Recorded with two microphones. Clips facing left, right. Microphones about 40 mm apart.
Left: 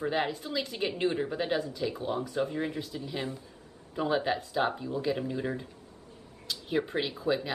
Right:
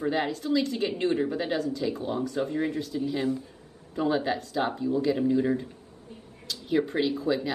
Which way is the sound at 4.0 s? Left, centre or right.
Centre.